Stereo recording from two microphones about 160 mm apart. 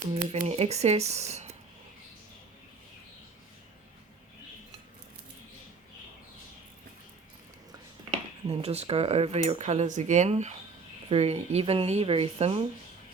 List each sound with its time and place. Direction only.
0.1 s speech: 45° right (ahead or behind)
8.4 s a woman's voice: 40° right (ahead or behind)